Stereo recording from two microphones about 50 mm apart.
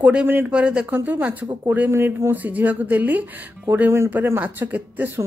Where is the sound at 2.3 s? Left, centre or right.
Right.